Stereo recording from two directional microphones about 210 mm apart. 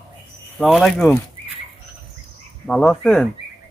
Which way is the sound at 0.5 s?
Centre (ahead or behind).